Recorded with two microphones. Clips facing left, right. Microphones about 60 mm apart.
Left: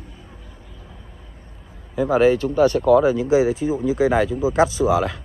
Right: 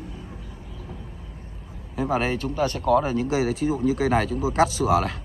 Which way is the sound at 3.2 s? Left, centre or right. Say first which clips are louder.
Left 5 dB; left.